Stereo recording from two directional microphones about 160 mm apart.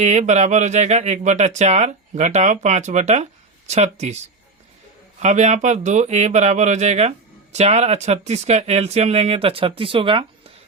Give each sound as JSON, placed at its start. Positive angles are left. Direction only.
{"t": 0.0, "sound": "speech", "side_deg": -45}
{"t": 5.2, "sound": "speech", "side_deg": -50}